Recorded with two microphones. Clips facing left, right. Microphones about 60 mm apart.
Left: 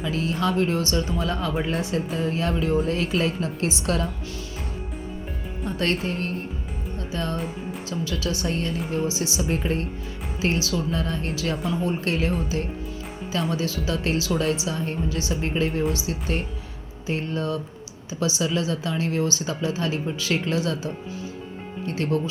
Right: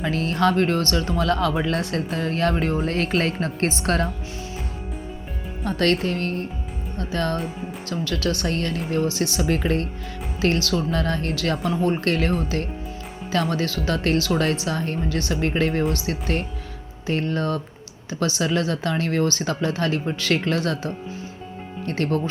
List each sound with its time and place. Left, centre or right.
0.0 s speech: right
5.6 s a woman's voice: right
10.4 s a woman's voice: right